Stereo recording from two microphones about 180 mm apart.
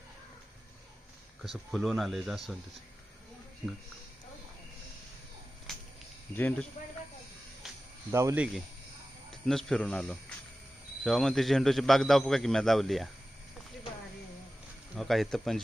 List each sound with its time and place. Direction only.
1.4 s a man's voice: centre (ahead or behind)
5.7 s cricket: centre (ahead or behind)
6.3 s speech: 10° left (ahead or behind)
8.1 s speech: 15° right (ahead or behind)
9.3 s a man's voice: centre (ahead or behind)
14.9 s a man's voice: centre (ahead or behind)